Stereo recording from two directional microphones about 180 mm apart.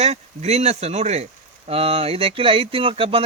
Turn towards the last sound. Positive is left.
turn(degrees=-30)  # may be behind; listen again after turning